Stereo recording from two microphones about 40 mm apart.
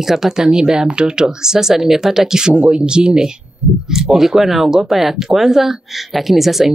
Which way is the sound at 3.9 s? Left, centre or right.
Centre.